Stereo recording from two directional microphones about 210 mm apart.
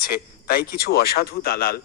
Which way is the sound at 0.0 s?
45° left (ahead or behind).